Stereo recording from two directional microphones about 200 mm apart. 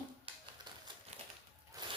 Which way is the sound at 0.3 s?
25° right (ahead or behind).